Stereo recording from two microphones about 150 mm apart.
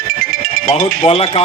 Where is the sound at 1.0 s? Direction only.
40° left (ahead or behind).